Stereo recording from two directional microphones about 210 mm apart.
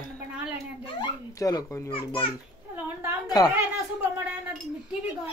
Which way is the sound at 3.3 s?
20° left (ahead or behind).